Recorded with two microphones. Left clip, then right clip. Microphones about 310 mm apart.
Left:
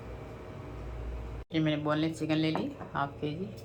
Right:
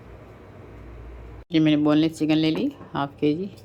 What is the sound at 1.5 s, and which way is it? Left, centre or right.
Speech, right.